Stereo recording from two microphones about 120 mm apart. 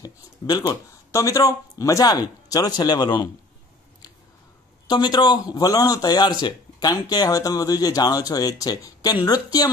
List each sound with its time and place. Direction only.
0.0 s speech: 30° left (ahead or behind)
4.8 s speech: 40° left (ahead or behind)